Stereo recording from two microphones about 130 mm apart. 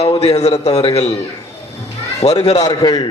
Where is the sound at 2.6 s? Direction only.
30° left (ahead or behind).